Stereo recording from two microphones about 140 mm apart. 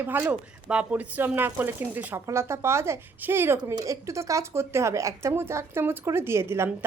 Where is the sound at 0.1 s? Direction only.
15° right (ahead or behind).